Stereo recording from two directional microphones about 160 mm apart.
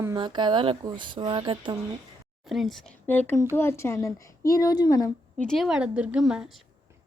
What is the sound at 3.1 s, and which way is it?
A woman's voice, 10° left (ahead or behind).